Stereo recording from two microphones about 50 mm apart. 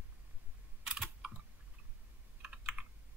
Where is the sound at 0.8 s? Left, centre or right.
Centre.